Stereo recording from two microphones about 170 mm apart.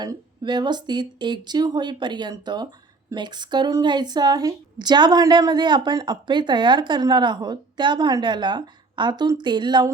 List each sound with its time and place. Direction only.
0.0 s a woman's voice: 25° right (ahead or behind)